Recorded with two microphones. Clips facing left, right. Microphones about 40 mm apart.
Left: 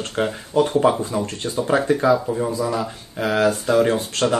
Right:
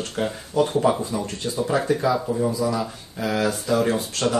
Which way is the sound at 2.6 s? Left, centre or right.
Left.